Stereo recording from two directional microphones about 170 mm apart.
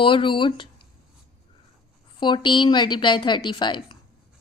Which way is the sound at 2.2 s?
25° left (ahead or behind).